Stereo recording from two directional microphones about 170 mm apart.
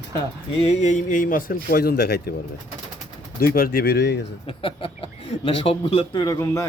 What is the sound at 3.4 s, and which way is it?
Speech, 60° left (ahead or behind).